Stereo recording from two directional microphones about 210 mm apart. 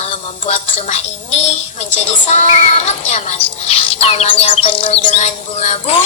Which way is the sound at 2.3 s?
30° left (ahead or behind).